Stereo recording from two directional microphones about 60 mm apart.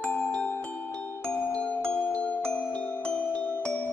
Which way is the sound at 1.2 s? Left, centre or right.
Left.